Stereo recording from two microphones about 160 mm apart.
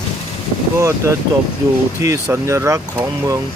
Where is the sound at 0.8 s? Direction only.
20° right (ahead or behind).